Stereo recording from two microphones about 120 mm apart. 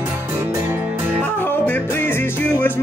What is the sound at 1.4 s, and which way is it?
Music, 15° left (ahead or behind).